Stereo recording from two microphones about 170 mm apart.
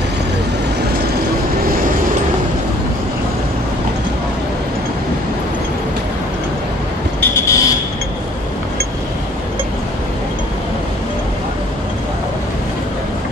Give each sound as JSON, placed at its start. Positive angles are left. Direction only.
{"t": 7.2, "sound": "buzzer", "side_deg": 15}